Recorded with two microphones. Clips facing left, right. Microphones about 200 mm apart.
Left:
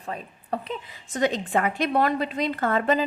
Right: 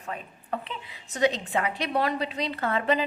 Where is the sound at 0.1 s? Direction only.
35° left (ahead or behind).